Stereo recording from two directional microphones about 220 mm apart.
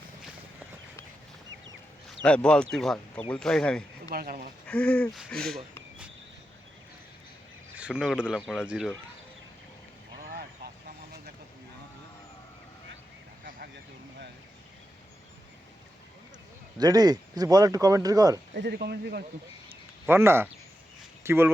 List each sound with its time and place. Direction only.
2.2 s speech: 5° left (ahead or behind)
4.1 s speech: 40° right (ahead or behind)
4.6 s speech: 5° left (ahead or behind)
7.8 s speech: 5° right (ahead or behind)
16.7 s speech: 15° right (ahead or behind)
18.5 s speech: 50° right (ahead or behind)
20.1 s speech: 10° right (ahead or behind)